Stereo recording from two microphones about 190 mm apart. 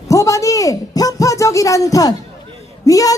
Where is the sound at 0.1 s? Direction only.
15° left (ahead or behind).